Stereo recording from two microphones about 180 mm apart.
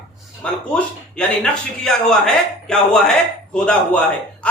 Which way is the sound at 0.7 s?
5° left (ahead or behind).